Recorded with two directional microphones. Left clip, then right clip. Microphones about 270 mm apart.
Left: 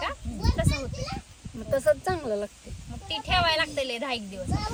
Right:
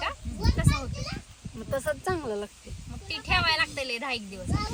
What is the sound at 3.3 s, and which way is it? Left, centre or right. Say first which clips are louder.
A woman's voice: left 1 dB; centre.